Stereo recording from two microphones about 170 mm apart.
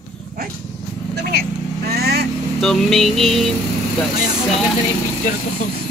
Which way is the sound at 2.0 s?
70° right (ahead or behind).